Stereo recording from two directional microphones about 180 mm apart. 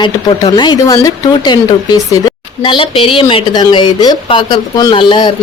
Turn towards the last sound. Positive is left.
turn(degrees=25)  # may be behind; listen again after turning